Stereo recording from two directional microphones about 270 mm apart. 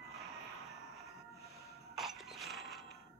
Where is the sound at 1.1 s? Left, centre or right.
Centre.